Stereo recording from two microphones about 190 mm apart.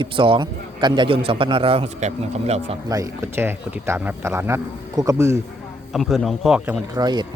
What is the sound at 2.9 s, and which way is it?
Speech, 15° right (ahead or behind).